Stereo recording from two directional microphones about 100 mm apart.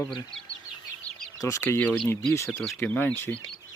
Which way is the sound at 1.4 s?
30° left (ahead or behind).